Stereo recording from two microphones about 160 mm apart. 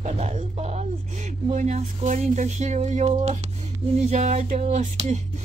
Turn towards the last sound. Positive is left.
turn(degrees=-45)  # may be behind; listen again after turning